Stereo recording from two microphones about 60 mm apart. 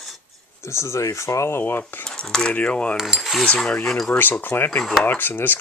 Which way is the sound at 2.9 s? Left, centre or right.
Centre.